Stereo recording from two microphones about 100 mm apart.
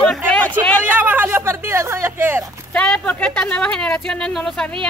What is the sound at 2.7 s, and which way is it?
Speech, 10° left (ahead or behind).